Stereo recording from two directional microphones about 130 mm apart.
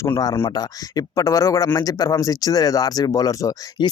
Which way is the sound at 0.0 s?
25° left (ahead or behind).